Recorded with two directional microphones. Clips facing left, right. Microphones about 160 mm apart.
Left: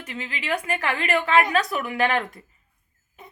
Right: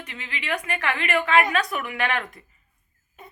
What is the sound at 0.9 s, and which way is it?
A woman's voice, 35° left (ahead or behind).